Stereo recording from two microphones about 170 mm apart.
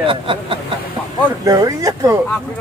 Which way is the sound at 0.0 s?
30° right (ahead or behind).